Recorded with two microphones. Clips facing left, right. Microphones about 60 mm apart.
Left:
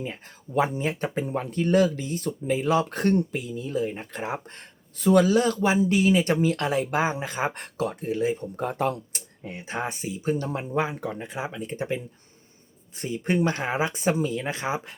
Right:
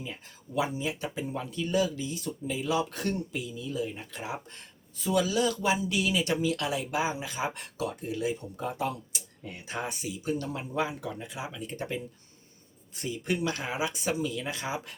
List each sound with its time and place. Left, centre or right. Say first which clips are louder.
0.0 s speech: left 6 dB; left
4.9 s speech: left 8 dB; left
8.5 s speech: left 6 dB; left
9.4 s speech: left 5 dB; left
13.0 s speech: left 6 dB; left